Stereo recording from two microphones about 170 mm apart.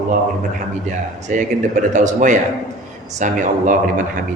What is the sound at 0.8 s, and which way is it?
A man's voice, 45° right (ahead or behind).